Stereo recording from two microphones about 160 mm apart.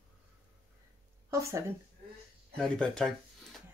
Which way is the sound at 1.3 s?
20° right (ahead or behind).